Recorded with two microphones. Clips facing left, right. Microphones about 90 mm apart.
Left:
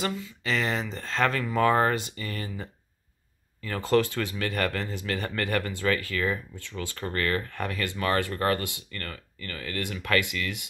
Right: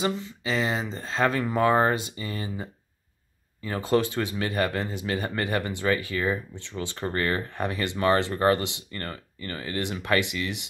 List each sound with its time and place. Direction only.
0.0 s speech: 25° right (ahead or behind)
0.4 s speech: 15° right (ahead or behind)